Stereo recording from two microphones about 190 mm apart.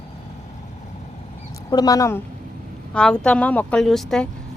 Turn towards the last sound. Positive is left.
turn(degrees=0)  # may be behind; listen again after turning